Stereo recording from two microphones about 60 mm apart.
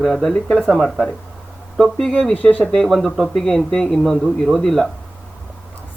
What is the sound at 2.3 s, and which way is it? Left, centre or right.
Speech, left.